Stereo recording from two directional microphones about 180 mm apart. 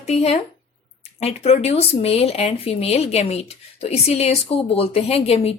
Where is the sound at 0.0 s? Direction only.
35° left (ahead or behind).